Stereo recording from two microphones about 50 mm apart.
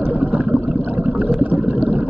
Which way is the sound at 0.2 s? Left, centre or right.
Right.